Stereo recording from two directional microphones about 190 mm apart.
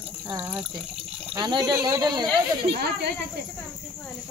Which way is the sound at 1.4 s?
20° right (ahead or behind).